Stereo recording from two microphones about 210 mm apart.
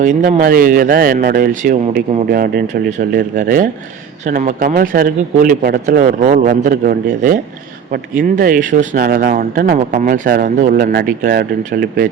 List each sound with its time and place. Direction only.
0.0 s speech: 40° right (ahead or behind)